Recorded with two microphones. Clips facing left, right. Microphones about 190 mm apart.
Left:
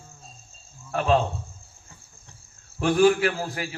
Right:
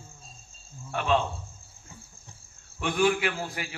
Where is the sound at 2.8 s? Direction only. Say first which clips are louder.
Left 6 dB; 35° left (ahead or behind).